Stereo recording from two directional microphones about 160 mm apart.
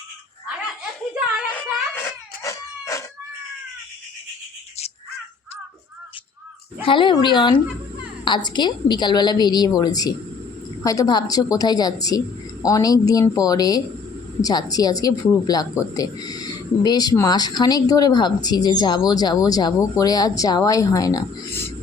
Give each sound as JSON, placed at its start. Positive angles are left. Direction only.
{"t": 1.5, "sound": "baby cry", "side_deg": 10}
{"t": 6.8, "sound": "a woman's voice", "side_deg": 30}